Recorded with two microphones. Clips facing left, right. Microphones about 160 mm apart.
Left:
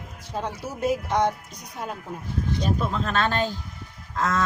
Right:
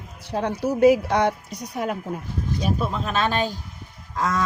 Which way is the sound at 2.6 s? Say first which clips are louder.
Right 2 dB; 10° right (ahead or behind).